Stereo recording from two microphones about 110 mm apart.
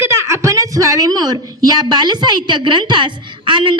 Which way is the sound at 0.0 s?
25° right (ahead or behind).